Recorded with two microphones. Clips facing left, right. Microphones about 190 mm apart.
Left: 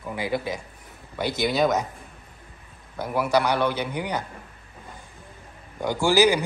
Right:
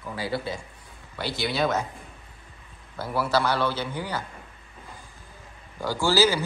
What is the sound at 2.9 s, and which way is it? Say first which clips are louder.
A man's voice: left 3 dB; 15° left (ahead or behind).